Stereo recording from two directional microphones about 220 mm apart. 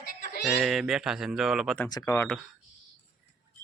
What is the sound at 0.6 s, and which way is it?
Speech, centre (ahead or behind).